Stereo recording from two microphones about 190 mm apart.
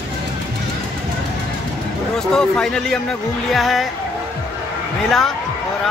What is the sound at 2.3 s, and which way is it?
Speech, 5° left (ahead or behind).